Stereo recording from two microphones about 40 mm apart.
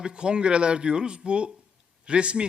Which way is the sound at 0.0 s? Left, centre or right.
Right.